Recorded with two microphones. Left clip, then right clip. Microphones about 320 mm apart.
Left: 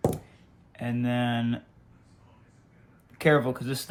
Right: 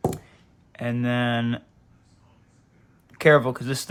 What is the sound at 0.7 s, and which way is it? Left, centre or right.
Speech, right.